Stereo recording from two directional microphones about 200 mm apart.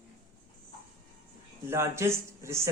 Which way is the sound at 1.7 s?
15° right (ahead or behind).